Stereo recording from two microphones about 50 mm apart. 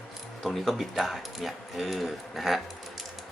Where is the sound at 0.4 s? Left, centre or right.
Centre.